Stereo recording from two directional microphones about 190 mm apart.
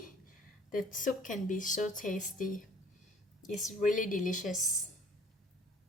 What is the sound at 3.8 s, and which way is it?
Speech, 45° left (ahead or behind).